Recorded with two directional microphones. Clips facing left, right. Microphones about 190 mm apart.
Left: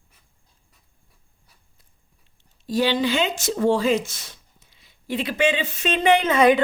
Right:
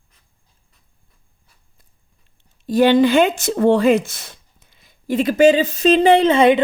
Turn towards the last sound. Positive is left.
turn(degrees=-25)  # may be behind; listen again after turning